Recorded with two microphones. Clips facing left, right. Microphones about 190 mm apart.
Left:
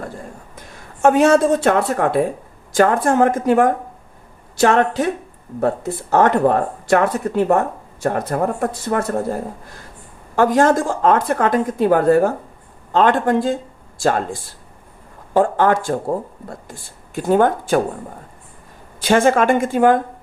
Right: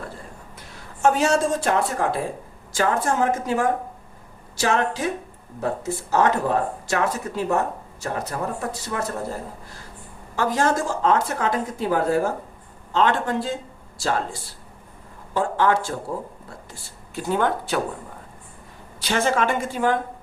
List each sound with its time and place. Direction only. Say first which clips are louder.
1.0 s speech: left 7 dB; 55° left (ahead or behind)
15.3 s speech: left 6 dB; 50° left (ahead or behind)
19.0 s speech: left 8 dB; 50° left (ahead or behind)